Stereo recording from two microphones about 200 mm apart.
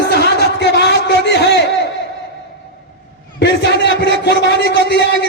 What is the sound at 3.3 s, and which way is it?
A man's voice, 60° left (ahead or behind).